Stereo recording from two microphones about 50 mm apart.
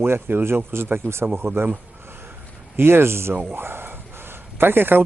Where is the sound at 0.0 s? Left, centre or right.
Right.